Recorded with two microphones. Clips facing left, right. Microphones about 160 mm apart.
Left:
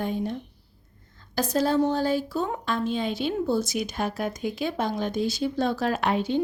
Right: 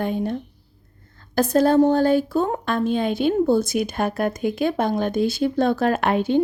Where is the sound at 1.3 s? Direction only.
55° right (ahead or behind).